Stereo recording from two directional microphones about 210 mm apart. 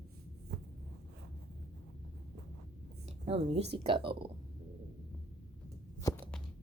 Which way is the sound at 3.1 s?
30° right (ahead or behind).